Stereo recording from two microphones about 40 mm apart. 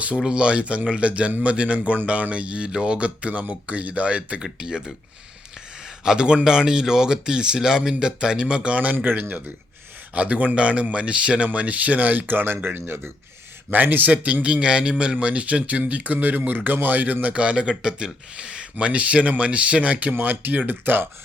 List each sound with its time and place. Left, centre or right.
0.3 s speech: right
4.4 s speech: right
6.1 s speech: right
10.2 s speech: right
12.6 s speech: right
13.7 s speech: right
14.4 s speech: right
20.1 s speech: right